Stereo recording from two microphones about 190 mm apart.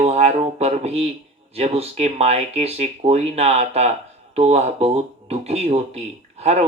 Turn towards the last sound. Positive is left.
turn(degrees=-35)  # may be behind; listen again after turning